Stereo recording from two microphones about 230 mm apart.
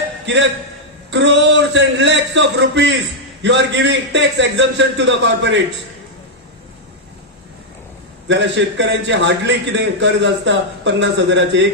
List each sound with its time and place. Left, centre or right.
0.3 s a man's voice: right
8.3 s a man's voice: right